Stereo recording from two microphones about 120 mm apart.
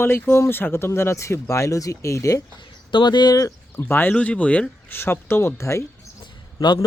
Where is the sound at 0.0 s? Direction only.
20° left (ahead or behind).